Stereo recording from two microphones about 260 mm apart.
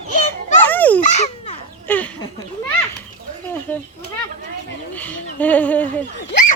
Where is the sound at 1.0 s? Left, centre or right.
Left.